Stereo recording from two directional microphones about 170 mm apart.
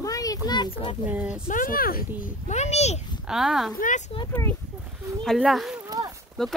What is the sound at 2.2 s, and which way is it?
Speech, 40° left (ahead or behind).